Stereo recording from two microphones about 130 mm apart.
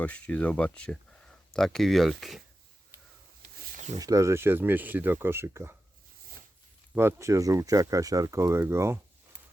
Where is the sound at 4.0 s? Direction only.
25° right (ahead or behind).